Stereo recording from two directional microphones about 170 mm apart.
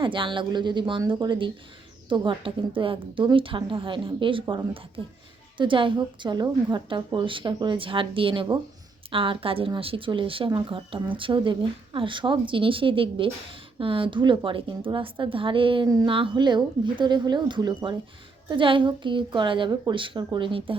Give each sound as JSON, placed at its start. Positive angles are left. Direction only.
{"t": 0.0, "sound": "a woman's voice", "side_deg": -30}